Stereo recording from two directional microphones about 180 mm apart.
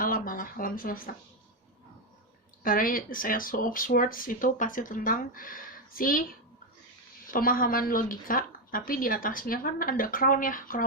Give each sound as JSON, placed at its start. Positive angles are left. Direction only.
{"t": 0.0, "sound": "a sound", "side_deg": 50}
{"t": 2.6, "sound": "a woman's voice", "side_deg": 50}
{"t": 7.3, "sound": "a woman's voice", "side_deg": 50}